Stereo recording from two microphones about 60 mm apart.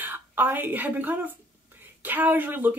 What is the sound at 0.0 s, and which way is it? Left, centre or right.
A woman's voice, right.